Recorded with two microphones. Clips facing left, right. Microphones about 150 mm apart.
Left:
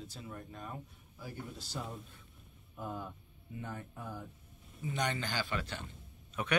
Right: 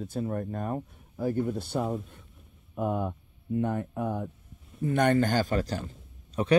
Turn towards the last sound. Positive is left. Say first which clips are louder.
# right 10 dB
turn(degrees=-35)  # may be behind; listen again after turning